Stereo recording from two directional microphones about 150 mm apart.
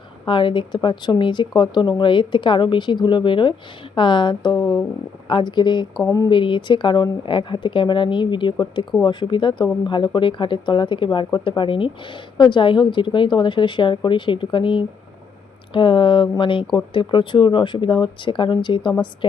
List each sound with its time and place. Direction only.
0.3 s speech: 30° left (ahead or behind)
6.0 s speech: 20° left (ahead or behind)
6.3 s speech: 35° left (ahead or behind)